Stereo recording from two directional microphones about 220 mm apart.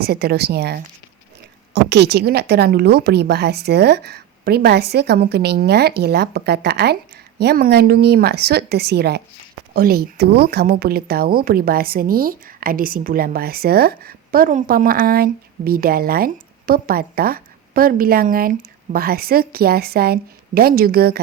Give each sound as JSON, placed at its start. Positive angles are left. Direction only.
{"t": 0.0, "sound": "speech", "side_deg": -45}